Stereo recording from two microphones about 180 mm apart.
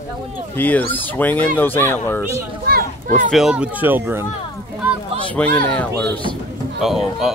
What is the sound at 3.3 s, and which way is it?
Speech, 5° right (ahead or behind).